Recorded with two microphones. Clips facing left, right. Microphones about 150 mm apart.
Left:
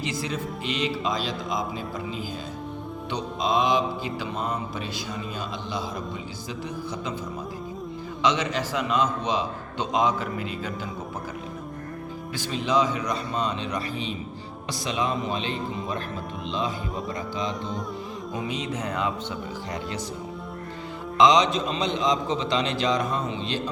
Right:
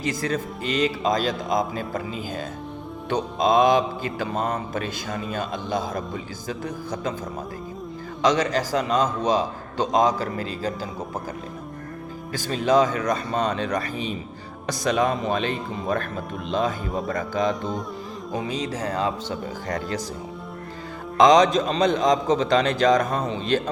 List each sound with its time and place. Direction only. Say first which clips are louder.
0.0 s mantra: right 4 dB; 45° right (ahead or behind)
3.1 s mantra: right 6 dB; 50° right (ahead or behind)
8.2 s a man's voice: right 4 dB; 45° right (ahead or behind)
12.5 s mantra: right 4 dB; 45° right (ahead or behind)
18.3 s a man's voice: right 3 dB; 35° right (ahead or behind)
21.2 s mantra: right 4 dB; 45° right (ahead or behind)